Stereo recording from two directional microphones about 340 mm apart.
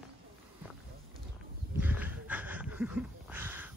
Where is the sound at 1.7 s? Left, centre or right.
Centre.